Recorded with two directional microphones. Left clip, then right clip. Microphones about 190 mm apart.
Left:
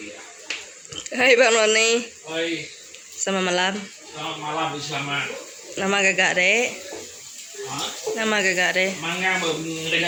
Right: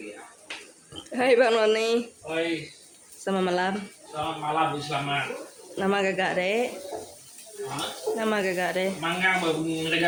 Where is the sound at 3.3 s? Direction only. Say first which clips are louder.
Left 4 dB; centre (ahead or behind).